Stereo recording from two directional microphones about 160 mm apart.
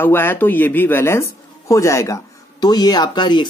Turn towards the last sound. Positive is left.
turn(degrees=30)  # may be behind; listen again after turning